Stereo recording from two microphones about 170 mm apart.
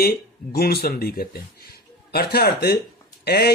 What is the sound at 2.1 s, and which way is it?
Mantra, 65° left (ahead or behind).